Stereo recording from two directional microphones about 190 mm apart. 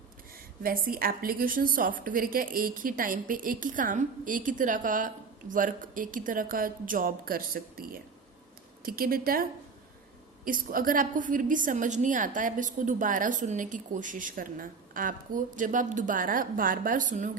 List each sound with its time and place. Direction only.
0.6 s a woman's voice: 50° right (ahead or behind)